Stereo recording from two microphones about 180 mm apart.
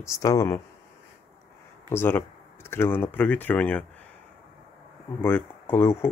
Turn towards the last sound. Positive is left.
turn(degrees=15)  # may be behind; listen again after turning